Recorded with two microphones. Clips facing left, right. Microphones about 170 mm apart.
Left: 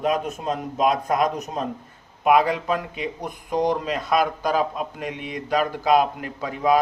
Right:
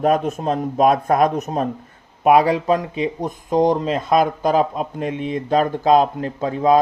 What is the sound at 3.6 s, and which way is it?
A man's voice, 25° right (ahead or behind).